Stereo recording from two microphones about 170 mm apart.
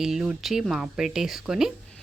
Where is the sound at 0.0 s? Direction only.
5° right (ahead or behind).